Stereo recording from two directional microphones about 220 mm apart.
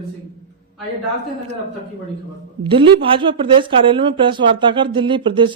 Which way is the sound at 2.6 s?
25° right (ahead or behind).